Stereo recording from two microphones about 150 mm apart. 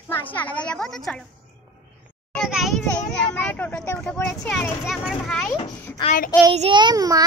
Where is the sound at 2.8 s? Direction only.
10° left (ahead or behind).